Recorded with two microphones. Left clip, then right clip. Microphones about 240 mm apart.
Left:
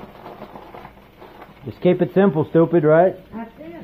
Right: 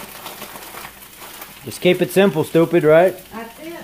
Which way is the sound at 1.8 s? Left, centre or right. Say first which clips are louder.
Right 2 dB; centre.